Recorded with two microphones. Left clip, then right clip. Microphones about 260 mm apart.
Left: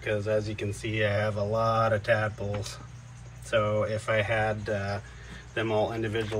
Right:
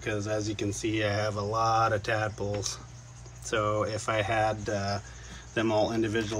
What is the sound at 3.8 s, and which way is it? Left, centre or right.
Speech, centre.